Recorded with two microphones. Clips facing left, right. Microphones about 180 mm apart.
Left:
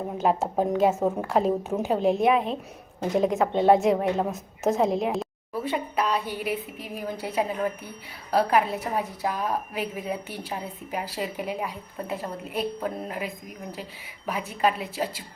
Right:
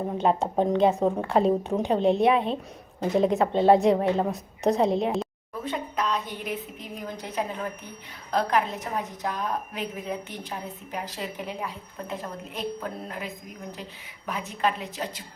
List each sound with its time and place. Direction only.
0.2 s a woman's voice: 5° left (ahead or behind)